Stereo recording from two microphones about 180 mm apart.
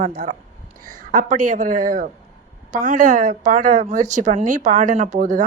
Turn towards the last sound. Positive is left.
turn(degrees=-45)  # may be behind; listen again after turning